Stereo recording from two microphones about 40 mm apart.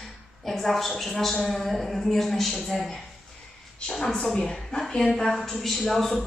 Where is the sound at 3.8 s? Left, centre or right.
Centre.